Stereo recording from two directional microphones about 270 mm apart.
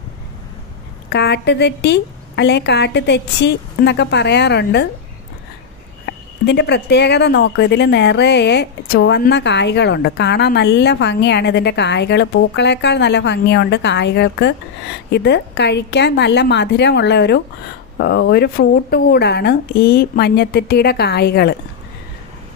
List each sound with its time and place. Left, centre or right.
1.1 s speech: left
6.4 s speech: left